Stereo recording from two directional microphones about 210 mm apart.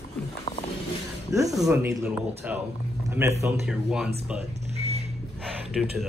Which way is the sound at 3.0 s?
15° right (ahead or behind).